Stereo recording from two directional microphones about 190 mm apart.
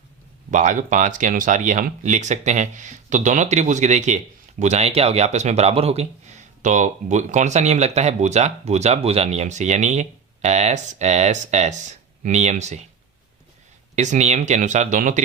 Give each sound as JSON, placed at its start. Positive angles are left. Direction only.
{"t": 0.5, "sound": "speech", "side_deg": -40}
{"t": 13.9, "sound": "speech", "side_deg": -40}